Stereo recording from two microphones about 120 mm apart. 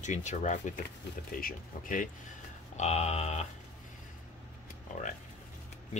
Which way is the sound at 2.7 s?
65° left (ahead or behind).